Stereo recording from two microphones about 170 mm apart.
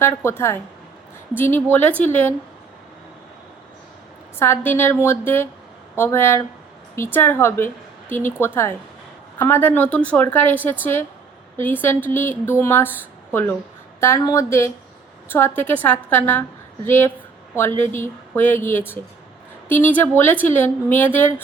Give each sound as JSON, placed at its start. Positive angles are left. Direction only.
{"t": 0.0, "sound": "speech", "side_deg": 15}
{"t": 4.4, "sound": "speech", "side_deg": 10}